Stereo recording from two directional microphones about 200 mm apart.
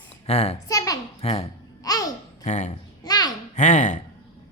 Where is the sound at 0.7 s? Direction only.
15° left (ahead or behind).